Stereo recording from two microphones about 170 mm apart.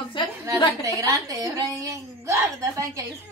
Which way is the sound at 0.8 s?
20° right (ahead or behind).